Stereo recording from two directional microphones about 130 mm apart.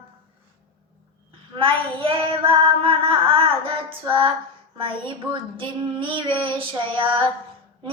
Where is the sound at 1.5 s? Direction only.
45° right (ahead or behind).